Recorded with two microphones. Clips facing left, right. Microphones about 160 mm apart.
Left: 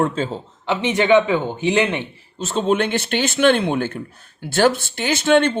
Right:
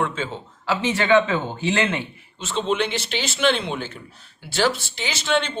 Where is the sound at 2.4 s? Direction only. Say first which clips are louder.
Left 4 dB; 45° left (ahead or behind).